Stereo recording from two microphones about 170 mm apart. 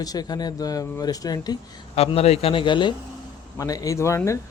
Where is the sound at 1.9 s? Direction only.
35° left (ahead or behind); by 4.4 s 15° left (ahead or behind).